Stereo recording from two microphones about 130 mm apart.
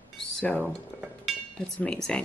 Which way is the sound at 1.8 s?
5° left (ahead or behind).